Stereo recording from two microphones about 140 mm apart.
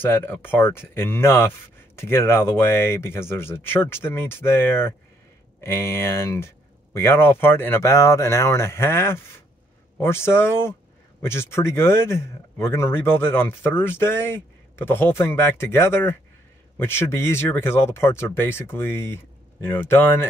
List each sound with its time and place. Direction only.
0.0 s speech: 15° left (ahead or behind)